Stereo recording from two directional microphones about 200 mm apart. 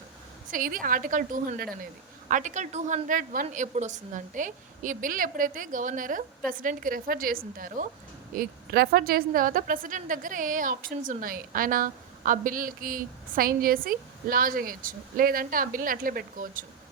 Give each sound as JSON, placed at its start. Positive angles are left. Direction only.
{"t": 0.5, "sound": "a woman's voice", "side_deg": -45}